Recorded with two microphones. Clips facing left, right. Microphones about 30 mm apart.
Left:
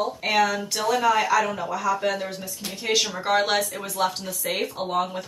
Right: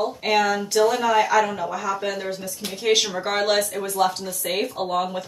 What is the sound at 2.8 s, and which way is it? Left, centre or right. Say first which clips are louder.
Speech: right 4 dB; right.